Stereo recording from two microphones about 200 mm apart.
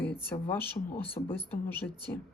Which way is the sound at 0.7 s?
10° left (ahead or behind).